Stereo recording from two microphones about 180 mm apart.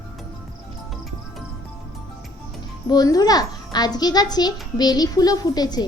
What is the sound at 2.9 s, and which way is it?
A child's voice, 20° left (ahead or behind).